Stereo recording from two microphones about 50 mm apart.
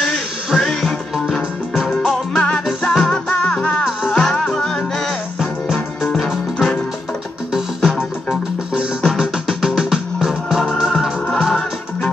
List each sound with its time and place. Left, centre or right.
0.6 s music: centre
2.3 s music: centre
2.6 s music: centre
3.1 s music: centre
6.1 s music: centre
9.0 s music: centre